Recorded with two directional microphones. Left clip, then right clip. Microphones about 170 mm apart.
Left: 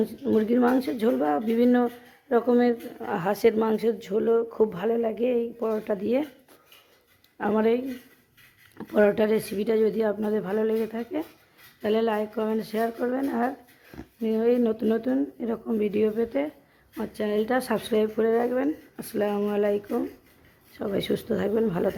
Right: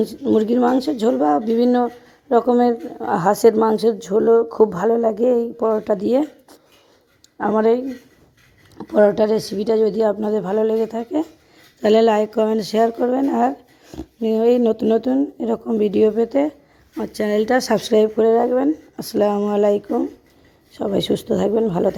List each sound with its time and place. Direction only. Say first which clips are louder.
0.2 s speech: right 6 dB; 25° right (ahead or behind)
3.2 s speech: right 8 dB; 30° right (ahead or behind)
3.8 s speech: right 8 dB; centre (ahead or behind)
5.0 s speech: right 8 dB; 30° right (ahead or behind)
5.6 s speech: right 8 dB; 20° right (ahead or behind)
8.8 s speech: right 7 dB; 10° right (ahead or behind); by 11.3 s 25° right (ahead or behind)
11.8 s speech: right 11 dB; 45° right (ahead or behind); by 18.7 s 15° right (ahead or behind)
18.9 s speech: right 9 dB; 25° right (ahead or behind)